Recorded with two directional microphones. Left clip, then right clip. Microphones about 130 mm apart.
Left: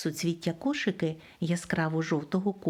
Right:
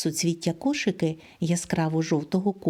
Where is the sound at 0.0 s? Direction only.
35° right (ahead or behind).